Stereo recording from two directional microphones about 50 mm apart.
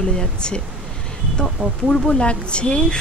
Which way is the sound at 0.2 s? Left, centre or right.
Centre.